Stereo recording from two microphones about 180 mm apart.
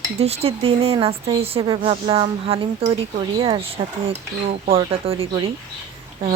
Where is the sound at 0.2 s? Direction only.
35° right (ahead or behind).